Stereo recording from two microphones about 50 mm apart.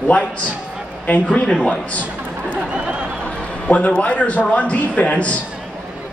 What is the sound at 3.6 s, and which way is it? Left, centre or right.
A man's voice, left.